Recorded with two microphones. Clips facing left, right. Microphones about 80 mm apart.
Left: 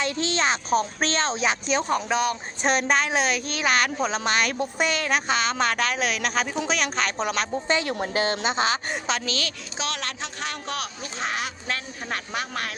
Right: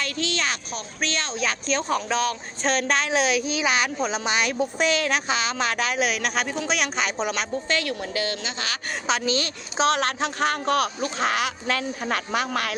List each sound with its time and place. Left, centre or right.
0.0 s a woman's voice: left; by 7.4 s centre
7.5 s a woman's voice: left
7.9 s speech: left
9.2 s a woman's voice: right
9.7 s speech: right
11.2 s speech: right